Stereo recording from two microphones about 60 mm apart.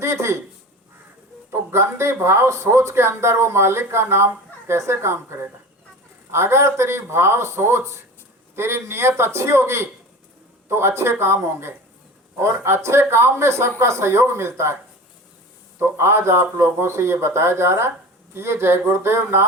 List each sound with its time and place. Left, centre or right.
0.0 s a sound: right
1.5 s speech: right
15.8 s speech: right